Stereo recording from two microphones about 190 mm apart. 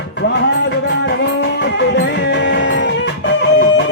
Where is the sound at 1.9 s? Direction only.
65° left (ahead or behind).